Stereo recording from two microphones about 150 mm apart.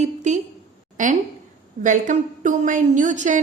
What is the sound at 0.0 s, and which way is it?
A woman's voice, 50° right (ahead or behind).